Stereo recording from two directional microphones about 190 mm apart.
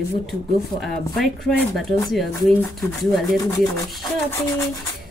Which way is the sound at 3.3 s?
20° left (ahead or behind).